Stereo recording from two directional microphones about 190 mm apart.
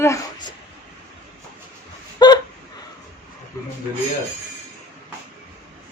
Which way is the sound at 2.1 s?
20° left (ahead or behind).